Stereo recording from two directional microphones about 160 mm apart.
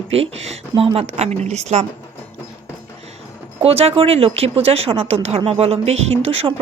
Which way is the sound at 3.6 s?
40° right (ahead or behind).